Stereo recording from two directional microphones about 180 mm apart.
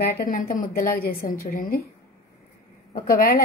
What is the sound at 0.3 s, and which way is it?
A woman's voice, 50° left (ahead or behind).